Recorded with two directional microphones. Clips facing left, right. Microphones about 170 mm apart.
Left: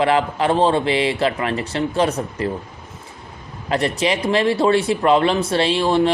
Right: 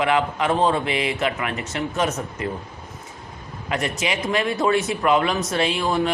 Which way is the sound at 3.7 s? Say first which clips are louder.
Left 5 dB; 35° left (ahead or behind).